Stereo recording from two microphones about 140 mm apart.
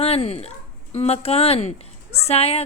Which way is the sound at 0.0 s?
45° left (ahead or behind).